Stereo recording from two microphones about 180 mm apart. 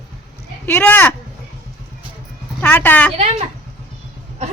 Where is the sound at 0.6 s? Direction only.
10° left (ahead or behind).